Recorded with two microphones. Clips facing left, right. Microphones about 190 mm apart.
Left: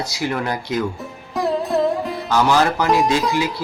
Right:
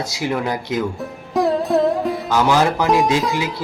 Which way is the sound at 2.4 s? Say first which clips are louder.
Right 1 dB; 20° right (ahead or behind).